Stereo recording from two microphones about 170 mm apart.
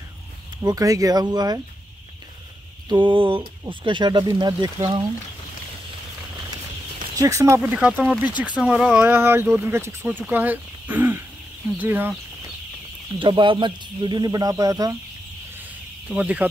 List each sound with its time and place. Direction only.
0.6 s speech: 20° right (ahead or behind)
2.9 s speech: 30° right (ahead or behind)
7.2 s speech: 20° right (ahead or behind)
7.7 s speech: 5° right (ahead or behind)
13.2 s speech: 30° right (ahead or behind)
16.1 s speech: 10° right (ahead or behind)